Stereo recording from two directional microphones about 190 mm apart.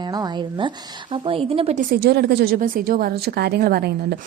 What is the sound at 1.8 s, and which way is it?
A woman's voice, 50° right (ahead or behind).